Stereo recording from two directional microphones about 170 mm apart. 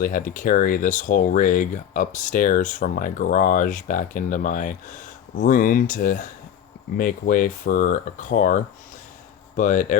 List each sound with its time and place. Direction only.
0.0 s speech: 50° left (ahead or behind)
9.6 s speech: 50° left (ahead or behind)